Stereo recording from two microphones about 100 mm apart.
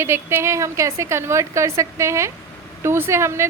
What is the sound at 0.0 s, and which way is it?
A woman's voice, 25° right (ahead or behind).